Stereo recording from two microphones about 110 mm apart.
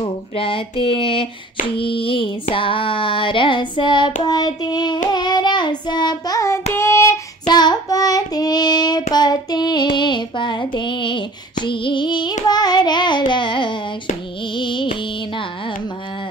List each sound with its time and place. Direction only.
0.0 s speech: 55° left (ahead or behind)
1.8 s child singing: 50° left (ahead or behind); by 7.2 s 25° left (ahead or behind)
7.4 s child singing: 40° left (ahead or behind)
14.5 s music: 45° left (ahead or behind)